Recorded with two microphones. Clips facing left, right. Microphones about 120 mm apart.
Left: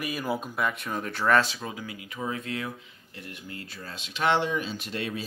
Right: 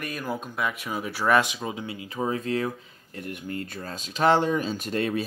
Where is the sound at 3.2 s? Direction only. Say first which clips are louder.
Right 8 dB; 50° right (ahead or behind).